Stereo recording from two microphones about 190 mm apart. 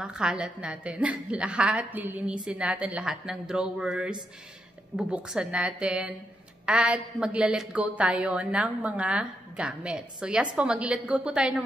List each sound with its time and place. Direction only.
0.0 s a woman's voice: 5° right (ahead or behind)